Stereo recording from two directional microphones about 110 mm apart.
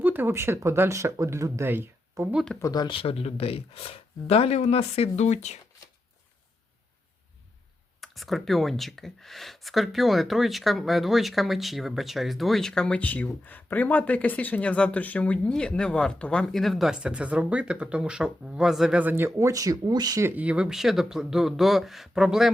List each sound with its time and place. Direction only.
0.0 s speech: 20° right (ahead or behind)
2.6 s speech: 30° left (ahead or behind)
2.8 s speech: 55° left (ahead or behind); by 5.5 s 90° left
8.0 s speech: centre (ahead or behind); by 20.2 s 35° right (ahead or behind)
20.2 s speech: 15° right (ahead or behind)